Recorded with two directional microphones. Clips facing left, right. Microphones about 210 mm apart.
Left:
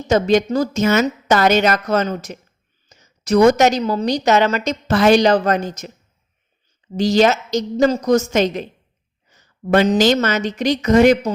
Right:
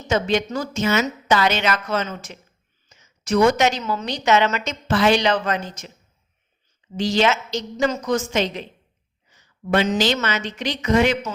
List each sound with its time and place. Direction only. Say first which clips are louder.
0.0 s a woman's voice: left 6 dB; 40° left (ahead or behind)